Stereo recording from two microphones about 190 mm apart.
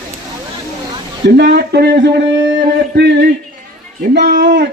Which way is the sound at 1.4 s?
60° right (ahead or behind).